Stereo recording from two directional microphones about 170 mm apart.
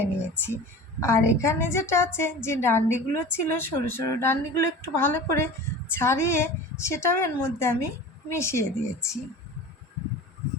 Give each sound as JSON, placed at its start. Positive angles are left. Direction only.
{"t": 0.0, "sound": "a woman's voice", "side_deg": 15}